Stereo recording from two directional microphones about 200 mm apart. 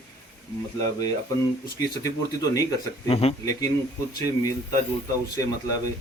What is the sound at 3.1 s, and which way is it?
Speech, 30° left (ahead or behind).